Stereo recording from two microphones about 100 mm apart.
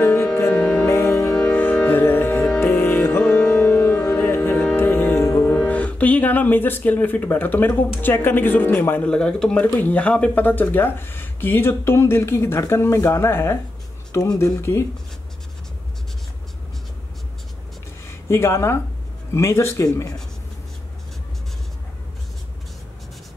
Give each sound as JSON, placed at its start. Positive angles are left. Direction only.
{"t": 0.0, "sound": "music", "side_deg": 20}
{"t": 0.9, "sound": "music", "side_deg": 25}
{"t": 1.3, "sound": "music", "side_deg": 15}
{"t": 5.5, "sound": "speech", "side_deg": 15}
{"t": 9.1, "sound": "speech", "side_deg": 5}
{"t": 18.3, "sound": "speech", "side_deg": 25}